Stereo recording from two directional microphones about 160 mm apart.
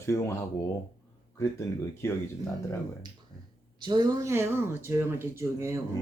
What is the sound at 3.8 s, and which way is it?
Speech, 30° right (ahead or behind).